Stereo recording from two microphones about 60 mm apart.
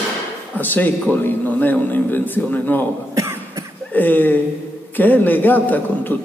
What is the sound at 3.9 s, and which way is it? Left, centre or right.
A man's voice, left.